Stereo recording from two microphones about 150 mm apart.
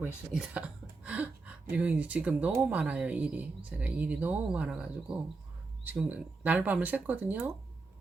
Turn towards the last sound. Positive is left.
turn(degrees=-10)  # may be behind; listen again after turning